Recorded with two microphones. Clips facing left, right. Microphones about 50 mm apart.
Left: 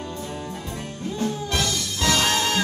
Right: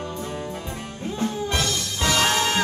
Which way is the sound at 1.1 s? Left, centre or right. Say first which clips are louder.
Right 1 dB; right.